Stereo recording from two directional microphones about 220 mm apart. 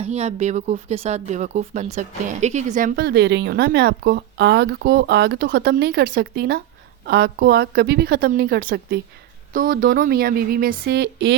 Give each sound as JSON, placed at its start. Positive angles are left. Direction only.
{"t": 0.0, "sound": "speech", "side_deg": -30}